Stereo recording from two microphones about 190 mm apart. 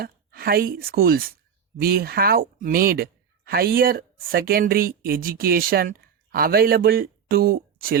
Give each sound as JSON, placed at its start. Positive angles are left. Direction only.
{"t": 0.0, "sound": "speech", "side_deg": -55}